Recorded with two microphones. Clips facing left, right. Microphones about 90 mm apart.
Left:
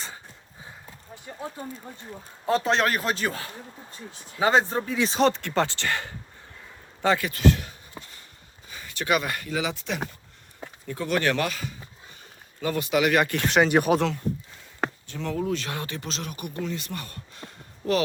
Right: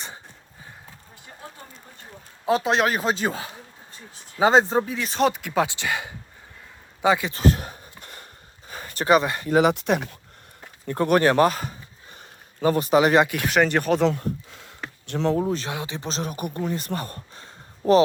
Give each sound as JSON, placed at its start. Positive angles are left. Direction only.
{"t": 2.5, "sound": "speech", "side_deg": -15}
{"t": 5.2, "sound": "speech", "side_deg": -10}
{"t": 7.3, "sound": "speech", "side_deg": -40}
{"t": 8.0, "sound": "sniff", "side_deg": -55}
{"t": 8.7, "sound": "speech", "side_deg": -45}
{"t": 9.5, "sound": "speech", "side_deg": -50}
{"t": 11.2, "sound": "speech", "side_deg": -35}
{"t": 13.2, "sound": "speech", "side_deg": -5}
{"t": 13.7, "sound": "speech", "side_deg": 10}
{"t": 14.2, "sound": "speech", "side_deg": -85}
{"t": 15.0, "sound": "speech", "side_deg": -65}
{"t": 15.3, "sound": "speech", "side_deg": -30}
{"t": 15.7, "sound": "speech", "side_deg": -15}
{"t": 16.0, "sound": "speech", "side_deg": -35}